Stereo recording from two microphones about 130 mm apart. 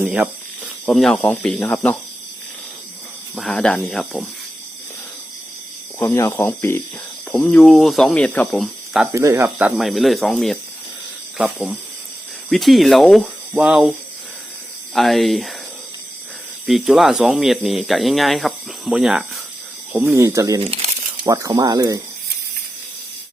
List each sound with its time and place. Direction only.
0.0 s snake: 10° right (ahead or behind)
0.9 s speech: 5° left (ahead or behind)
3.3 s speech: 5° left (ahead or behind)
6.0 s speech: 20° left (ahead or behind)
7.3 s speech: 5° left (ahead or behind)
9.1 s speech: 20° right (ahead or behind)
9.6 s speech: centre (ahead or behind)
14.9 s speech: centre (ahead or behind)
16.6 s speech: centre (ahead or behind)
19.9 s speech: 20° right (ahead or behind)